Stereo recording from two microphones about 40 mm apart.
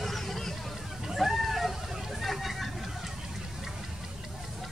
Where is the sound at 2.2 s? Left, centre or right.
Centre.